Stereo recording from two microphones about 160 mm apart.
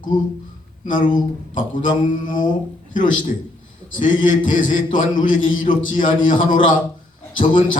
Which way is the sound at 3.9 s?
55° left (ahead or behind).